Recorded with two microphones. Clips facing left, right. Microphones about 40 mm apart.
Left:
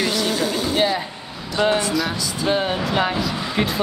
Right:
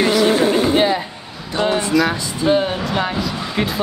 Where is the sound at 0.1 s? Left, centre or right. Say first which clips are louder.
Right 7 dB; right.